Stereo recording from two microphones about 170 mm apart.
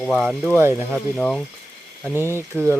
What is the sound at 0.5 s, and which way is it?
Speech, 15° right (ahead or behind).